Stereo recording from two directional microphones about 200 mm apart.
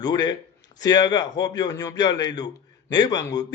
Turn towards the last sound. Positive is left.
turn(degrees=20)  # may be behind; listen again after turning